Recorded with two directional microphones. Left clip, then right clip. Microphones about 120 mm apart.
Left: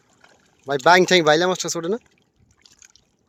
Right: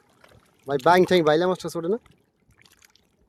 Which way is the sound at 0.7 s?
5° right (ahead or behind).